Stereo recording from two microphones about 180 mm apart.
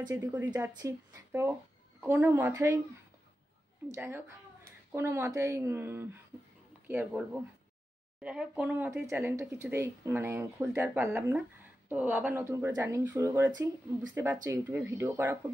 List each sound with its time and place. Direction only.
0.0 s speech: 10° right (ahead or behind)
3.9 s speech: 15° right (ahead or behind)